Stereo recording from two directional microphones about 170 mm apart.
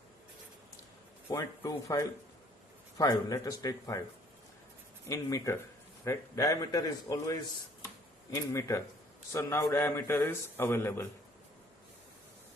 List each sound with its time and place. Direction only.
1.3 s a man's voice: 20° left (ahead or behind)
5.0 s a man's voice: 20° left (ahead or behind)
8.5 s a man's voice: 15° left (ahead or behind)